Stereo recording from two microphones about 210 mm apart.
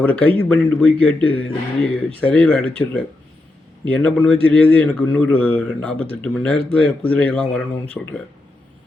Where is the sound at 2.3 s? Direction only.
5° left (ahead or behind).